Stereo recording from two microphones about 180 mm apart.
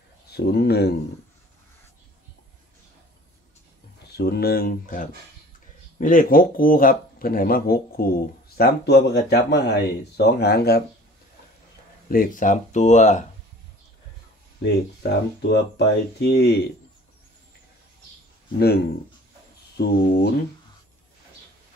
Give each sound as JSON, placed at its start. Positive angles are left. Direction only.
{"t": 0.3, "sound": "speech", "side_deg": 65}
{"t": 4.1, "sound": "speech", "side_deg": 65}
{"t": 12.1, "sound": "speech", "side_deg": 50}
{"t": 14.6, "sound": "speech", "side_deg": 70}
{"t": 19.8, "sound": "speech", "side_deg": 60}